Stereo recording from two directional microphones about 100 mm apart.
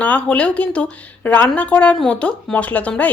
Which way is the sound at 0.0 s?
15° left (ahead or behind).